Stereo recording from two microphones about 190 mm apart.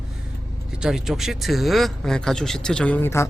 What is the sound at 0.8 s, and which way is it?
Speech, 5° right (ahead or behind).